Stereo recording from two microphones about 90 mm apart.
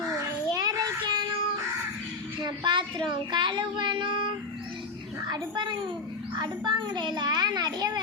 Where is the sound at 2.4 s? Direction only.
60° right (ahead or behind).